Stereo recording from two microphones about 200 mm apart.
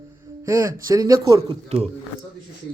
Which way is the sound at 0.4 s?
15° right (ahead or behind).